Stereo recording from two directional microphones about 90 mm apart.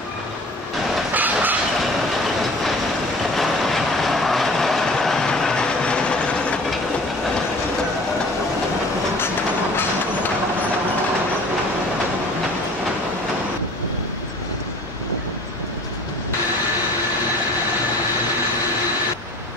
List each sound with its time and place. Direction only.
1.1 s train: 20° right (ahead or behind)
3.3 s train: centre (ahead or behind)